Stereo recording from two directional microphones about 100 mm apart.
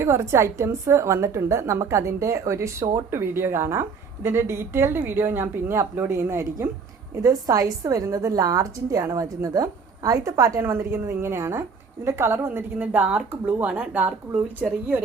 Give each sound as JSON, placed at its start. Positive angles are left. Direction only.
{"t": 0.0, "sound": "a woman's voice", "side_deg": -30}